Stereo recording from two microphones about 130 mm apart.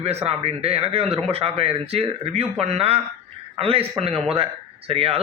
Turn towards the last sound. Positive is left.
turn(degrees=-50)  # may be behind; listen again after turning